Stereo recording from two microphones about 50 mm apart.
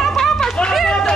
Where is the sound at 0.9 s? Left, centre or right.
Centre.